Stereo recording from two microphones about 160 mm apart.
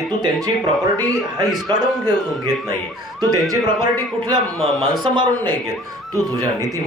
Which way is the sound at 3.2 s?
20° right (ahead or behind).